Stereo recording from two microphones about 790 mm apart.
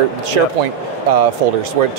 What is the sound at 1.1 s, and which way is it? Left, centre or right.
Speech, right.